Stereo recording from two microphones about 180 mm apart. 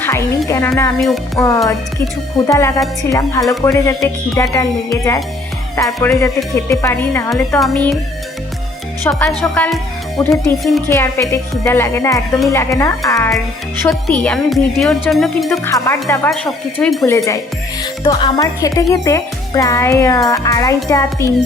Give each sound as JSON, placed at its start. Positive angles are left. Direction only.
{"t": 0.0, "sound": "music", "side_deg": 15}
{"t": 0.9, "sound": "speech", "side_deg": 0}
{"t": 2.5, "sound": "speech", "side_deg": 15}
{"t": 7.6, "sound": "speech", "side_deg": 0}
{"t": 9.0, "sound": "speech", "side_deg": 15}
{"t": 10.2, "sound": "speech", "side_deg": 15}
{"t": 13.8, "sound": "speech", "side_deg": 5}
{"t": 15.6, "sound": "speech", "side_deg": 15}
{"t": 16.3, "sound": "speech", "side_deg": 5}
{"t": 17.1, "sound": "speech", "side_deg": 15}